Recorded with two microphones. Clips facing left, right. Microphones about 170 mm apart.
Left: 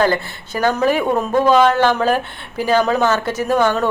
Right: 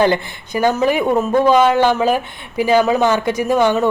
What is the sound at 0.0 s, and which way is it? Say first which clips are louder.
Speech: right 2 dB; 15° right (ahead or behind).